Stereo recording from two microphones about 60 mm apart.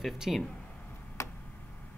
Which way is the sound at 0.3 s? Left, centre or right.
Centre.